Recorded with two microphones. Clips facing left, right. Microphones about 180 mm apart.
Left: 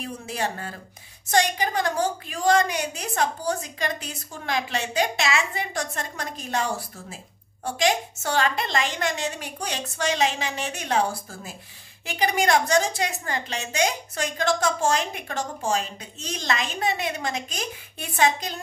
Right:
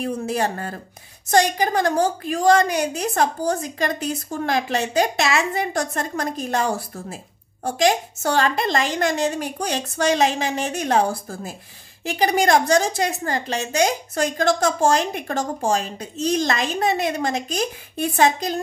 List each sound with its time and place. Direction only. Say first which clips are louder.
0.0 s a woman's voice: right 7 dB; 45° right (ahead or behind)